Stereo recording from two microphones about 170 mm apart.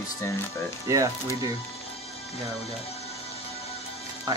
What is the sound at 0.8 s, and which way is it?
Speech, 20° right (ahead or behind).